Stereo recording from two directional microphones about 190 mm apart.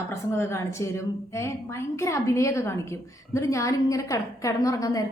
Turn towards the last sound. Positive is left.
turn(degrees=20)  # may be behind; listen again after turning